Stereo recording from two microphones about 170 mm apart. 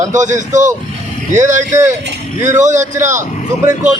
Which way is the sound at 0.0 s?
45° right (ahead or behind).